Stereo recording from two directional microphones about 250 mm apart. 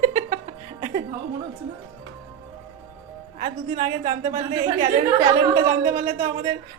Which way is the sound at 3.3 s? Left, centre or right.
Right.